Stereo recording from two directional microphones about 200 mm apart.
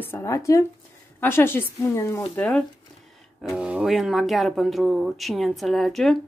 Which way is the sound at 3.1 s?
Centre (ahead or behind).